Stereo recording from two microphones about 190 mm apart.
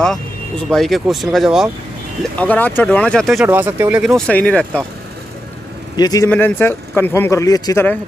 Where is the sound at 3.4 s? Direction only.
10° right (ahead or behind); by 4.8 s 5° left (ahead or behind).